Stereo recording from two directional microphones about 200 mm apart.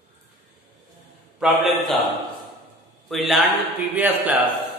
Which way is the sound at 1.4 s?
Centre (ahead or behind).